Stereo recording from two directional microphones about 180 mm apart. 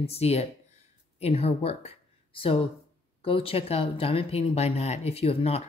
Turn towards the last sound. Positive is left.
turn(degrees=35)  # may be behind; listen again after turning